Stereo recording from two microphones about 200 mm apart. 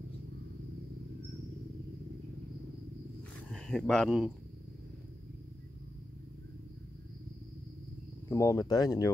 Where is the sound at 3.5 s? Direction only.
5° left (ahead or behind).